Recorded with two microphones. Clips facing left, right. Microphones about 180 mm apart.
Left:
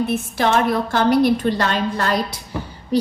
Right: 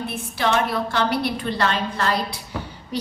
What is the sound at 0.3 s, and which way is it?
A woman's voice, 45° left (ahead or behind).